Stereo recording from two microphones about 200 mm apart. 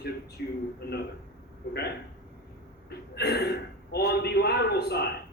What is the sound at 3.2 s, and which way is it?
A man's voice, 55° left (ahead or behind).